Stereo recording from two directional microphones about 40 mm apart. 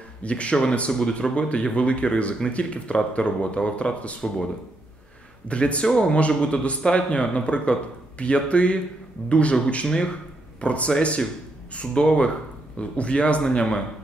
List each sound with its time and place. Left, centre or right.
0.2 s a man's voice: left
5.5 s a man's voice: left